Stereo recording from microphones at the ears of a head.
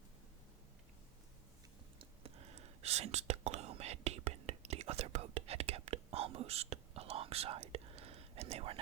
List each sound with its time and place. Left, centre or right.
2.0 s whispering: right